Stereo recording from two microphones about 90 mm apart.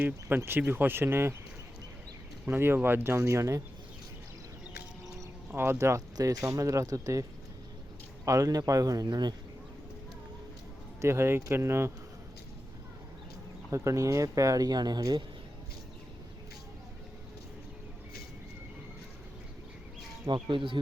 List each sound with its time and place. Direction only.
0.0 s speech: 25° right (ahead or behind)
2.5 s speech: 25° right (ahead or behind)
5.5 s speech: 25° right (ahead or behind); by 9.3 s 50° right (ahead or behind)
11.0 s speech: 30° right (ahead or behind)
13.7 s speech: 35° right (ahead or behind)
20.2 s speech: 60° right (ahead or behind)